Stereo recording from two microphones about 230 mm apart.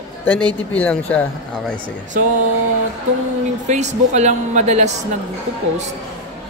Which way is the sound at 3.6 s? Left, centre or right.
Right.